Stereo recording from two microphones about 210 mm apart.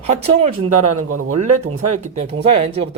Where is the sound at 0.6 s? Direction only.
90° right.